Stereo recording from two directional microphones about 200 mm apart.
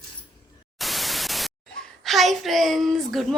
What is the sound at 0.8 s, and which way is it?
Speech, centre (ahead or behind).